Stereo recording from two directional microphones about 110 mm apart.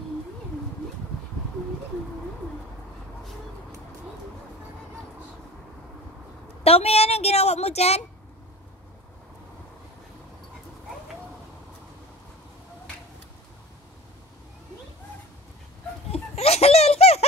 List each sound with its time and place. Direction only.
6.6 s a woman's voice: 70° left (ahead or behind)
16.1 s laughter: 70° left (ahead or behind)